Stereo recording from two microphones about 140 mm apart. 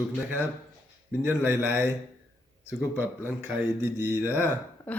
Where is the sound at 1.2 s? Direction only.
15° right (ahead or behind).